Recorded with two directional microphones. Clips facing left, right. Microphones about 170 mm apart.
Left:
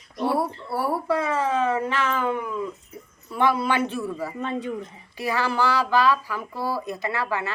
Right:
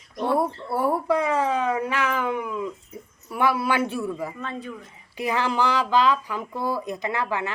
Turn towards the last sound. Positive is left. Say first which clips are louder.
# even
turn(degrees=-15)  # may be behind; listen again after turning